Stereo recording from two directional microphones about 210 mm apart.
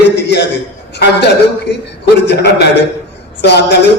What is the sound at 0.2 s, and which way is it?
Speech, 55° left (ahead or behind).